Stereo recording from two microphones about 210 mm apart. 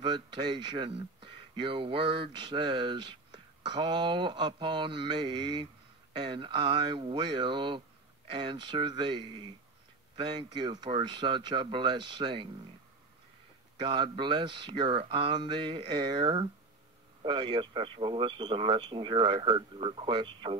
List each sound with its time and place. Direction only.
0.0 s speech: 20° right (ahead or behind)
13.7 s speech: 20° right (ahead or behind)